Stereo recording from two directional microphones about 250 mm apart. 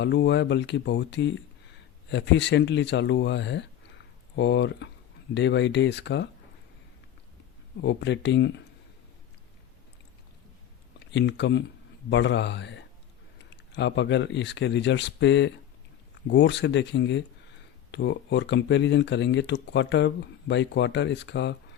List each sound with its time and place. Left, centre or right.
0.0 s speech: left
7.8 s speech: left
11.1 s speech: left